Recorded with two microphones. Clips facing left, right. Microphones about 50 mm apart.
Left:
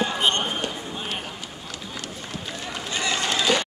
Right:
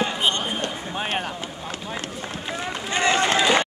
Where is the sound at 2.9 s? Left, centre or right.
Right.